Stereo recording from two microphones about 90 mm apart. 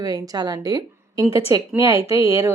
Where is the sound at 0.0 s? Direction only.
45° right (ahead or behind).